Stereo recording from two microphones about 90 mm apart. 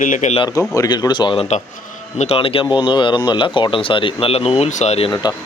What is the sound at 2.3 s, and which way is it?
Speech, 90° left.